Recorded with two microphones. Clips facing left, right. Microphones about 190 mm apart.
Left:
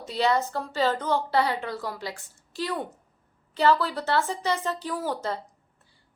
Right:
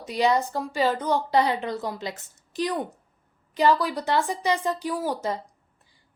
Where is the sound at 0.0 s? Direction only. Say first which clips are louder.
Right 2 dB; 15° right (ahead or behind).